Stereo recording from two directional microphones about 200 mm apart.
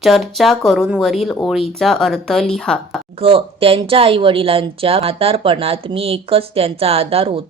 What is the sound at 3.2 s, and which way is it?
A woman's voice, 25° right (ahead or behind).